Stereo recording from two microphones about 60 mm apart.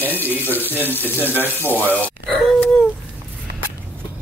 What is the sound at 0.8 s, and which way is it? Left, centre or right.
Speech, left.